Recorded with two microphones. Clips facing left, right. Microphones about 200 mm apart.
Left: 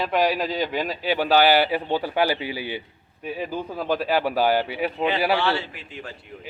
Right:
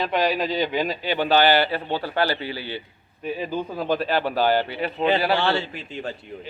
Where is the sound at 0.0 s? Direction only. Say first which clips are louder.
Even; 5° left (ahead or behind).